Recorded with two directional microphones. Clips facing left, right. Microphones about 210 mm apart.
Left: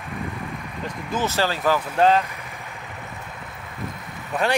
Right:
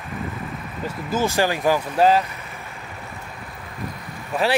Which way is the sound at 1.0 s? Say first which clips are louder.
Right 3 dB; 10° right (ahead or behind).